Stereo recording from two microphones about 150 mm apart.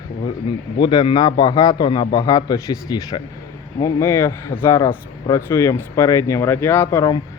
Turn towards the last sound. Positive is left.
turn(degrees=25)  # may be behind; listen again after turning